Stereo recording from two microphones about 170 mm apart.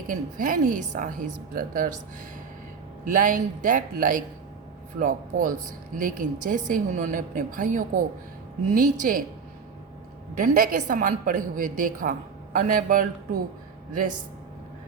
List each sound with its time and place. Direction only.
0.1 s a woman's voice: 55° right (ahead or behind)
3.0 s a woman's voice: 50° right (ahead or behind)
10.3 s a woman's voice: 55° right (ahead or behind)